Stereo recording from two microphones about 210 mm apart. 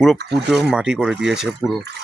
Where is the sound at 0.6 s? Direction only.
5° right (ahead or behind).